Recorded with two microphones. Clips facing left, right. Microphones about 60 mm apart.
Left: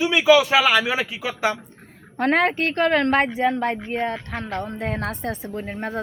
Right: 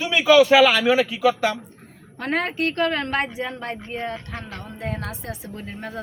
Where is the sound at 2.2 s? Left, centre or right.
Left.